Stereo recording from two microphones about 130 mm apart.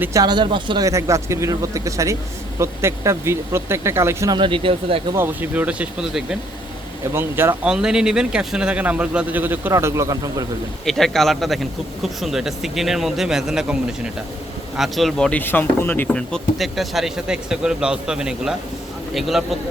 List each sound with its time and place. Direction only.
0.0 s speech: 25° right (ahead or behind)
0.9 s speech: 25° right (ahead or behind)
4.4 s speech: 40° right (ahead or behind)
5.1 s a man's voice: 15° right (ahead or behind)
7.1 s a man's voice: 20° right (ahead or behind)
7.7 s a man's voice: 5° right (ahead or behind); by 10.4 s 25° right (ahead or behind)
10.8 s speech: 5° left (ahead or behind)